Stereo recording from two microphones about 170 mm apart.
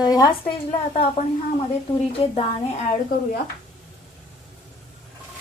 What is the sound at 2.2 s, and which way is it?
Speech, 30° left (ahead or behind).